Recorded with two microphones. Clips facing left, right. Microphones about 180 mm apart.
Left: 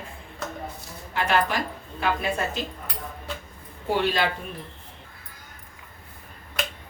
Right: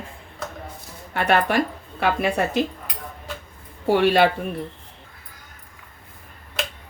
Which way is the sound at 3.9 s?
70° right (ahead or behind).